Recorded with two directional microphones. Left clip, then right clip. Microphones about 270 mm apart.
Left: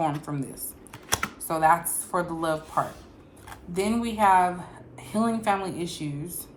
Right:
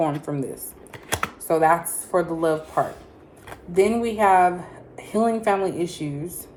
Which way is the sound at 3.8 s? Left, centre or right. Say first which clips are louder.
Even; centre.